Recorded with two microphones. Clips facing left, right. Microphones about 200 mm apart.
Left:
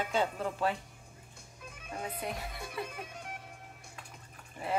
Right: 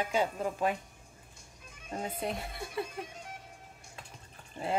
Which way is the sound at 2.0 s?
25° right (ahead or behind).